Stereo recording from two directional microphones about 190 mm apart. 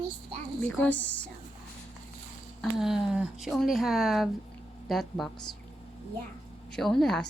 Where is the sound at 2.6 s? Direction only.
Centre (ahead or behind).